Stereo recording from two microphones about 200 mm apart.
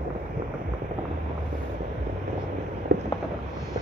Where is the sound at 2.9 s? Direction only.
60° right (ahead or behind).